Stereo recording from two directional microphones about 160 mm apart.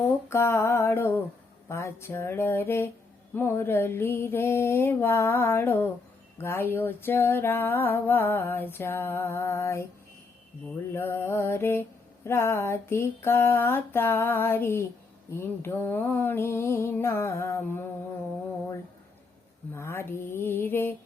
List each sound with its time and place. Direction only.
0.0 s mantra: 15° left (ahead or behind)
10.9 s mantra: 15° left (ahead or behind)
19.7 s mantra: 15° left (ahead or behind)